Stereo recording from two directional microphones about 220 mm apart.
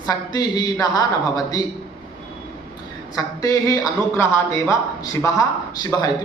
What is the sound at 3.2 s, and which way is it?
A man's voice, 15° left (ahead or behind).